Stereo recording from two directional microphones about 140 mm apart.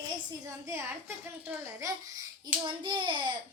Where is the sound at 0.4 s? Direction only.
20° right (ahead or behind).